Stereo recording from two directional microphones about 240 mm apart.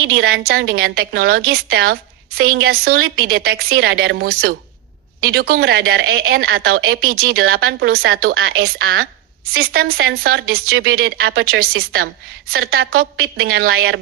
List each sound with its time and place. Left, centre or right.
0.0 s speech: right
0.6 s a woman's voice: right
0.9 s speech: right